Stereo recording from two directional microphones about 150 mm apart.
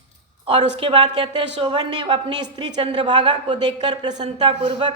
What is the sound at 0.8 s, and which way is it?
A man's voice, 35° right (ahead or behind).